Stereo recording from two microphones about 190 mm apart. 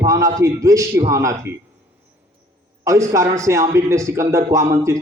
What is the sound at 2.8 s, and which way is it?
A man's voice, 15° right (ahead or behind).